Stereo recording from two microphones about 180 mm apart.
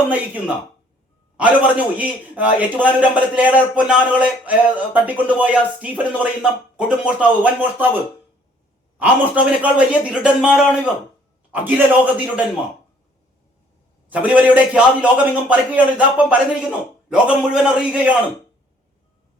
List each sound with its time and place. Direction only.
1.4 s a man's voice: 10° right (ahead or behind)
9.0 s a man's voice: 10° right (ahead or behind)
14.1 s a man's voice: 10° right (ahead or behind)